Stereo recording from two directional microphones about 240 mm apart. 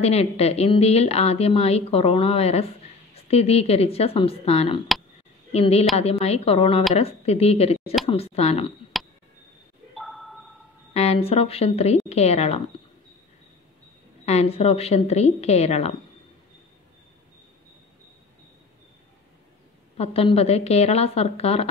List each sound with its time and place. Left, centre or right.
0.0 s a woman's voice: left
8.9 s a sound: centre
10.9 s a woman's voice: left
14.2 s a woman's voice: left
20.0 s a woman's voice: left